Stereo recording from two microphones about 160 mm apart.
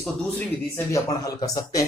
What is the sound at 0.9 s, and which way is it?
Speech, 20° left (ahead or behind).